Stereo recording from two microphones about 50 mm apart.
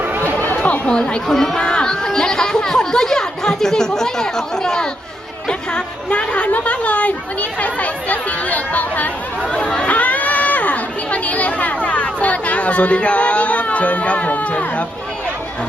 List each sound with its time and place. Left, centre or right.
0.5 s chatter: left
0.9 s a woman's voice: centre; by 9.0 s left
9.6 s speech: left